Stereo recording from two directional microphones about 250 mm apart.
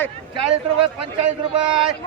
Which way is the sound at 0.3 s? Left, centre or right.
Right.